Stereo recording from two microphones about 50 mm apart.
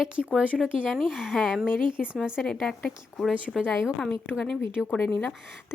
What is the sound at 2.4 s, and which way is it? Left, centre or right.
Speech, centre.